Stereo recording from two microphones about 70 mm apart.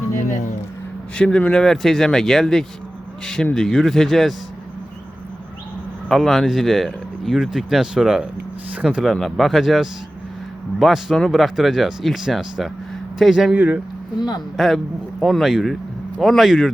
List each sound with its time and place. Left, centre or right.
1.1 s speech: centre
6.1 s speech: centre
9.1 s speech: centre
13.5 s speech: centre
14.2 s speech: left
14.5 s speech: centre